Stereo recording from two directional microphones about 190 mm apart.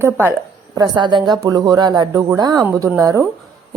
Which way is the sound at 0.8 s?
25° right (ahead or behind).